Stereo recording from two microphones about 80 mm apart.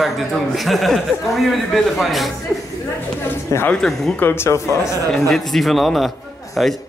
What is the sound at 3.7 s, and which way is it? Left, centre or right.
Speech, centre.